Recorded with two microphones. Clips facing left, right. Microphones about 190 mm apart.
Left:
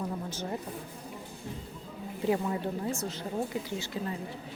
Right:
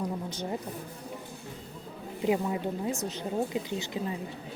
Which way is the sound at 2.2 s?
15° right (ahead or behind).